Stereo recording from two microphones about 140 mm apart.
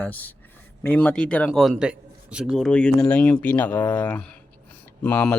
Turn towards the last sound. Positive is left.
turn(degrees=10)  # may be behind; listen again after turning